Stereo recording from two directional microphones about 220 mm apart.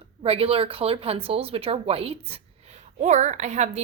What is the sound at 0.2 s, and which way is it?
A woman's voice, 25° right (ahead or behind).